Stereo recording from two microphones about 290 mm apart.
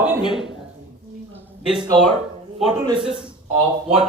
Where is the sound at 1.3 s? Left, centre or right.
Centre.